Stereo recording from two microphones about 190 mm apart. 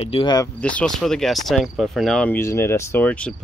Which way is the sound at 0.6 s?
5° left (ahead or behind).